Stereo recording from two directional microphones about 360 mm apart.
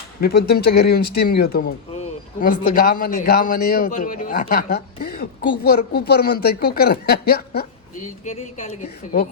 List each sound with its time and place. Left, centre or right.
0.2 s speech: left